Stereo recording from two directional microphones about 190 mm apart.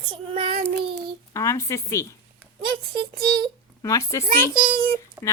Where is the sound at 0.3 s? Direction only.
30° right (ahead or behind).